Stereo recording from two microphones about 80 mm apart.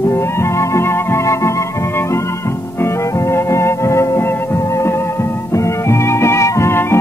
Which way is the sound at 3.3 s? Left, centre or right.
Left.